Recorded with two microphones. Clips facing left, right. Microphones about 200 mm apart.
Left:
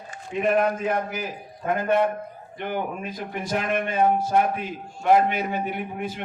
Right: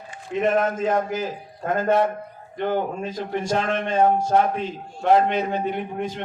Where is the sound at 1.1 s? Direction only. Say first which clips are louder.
Right 5 dB; 15° left (ahead or behind).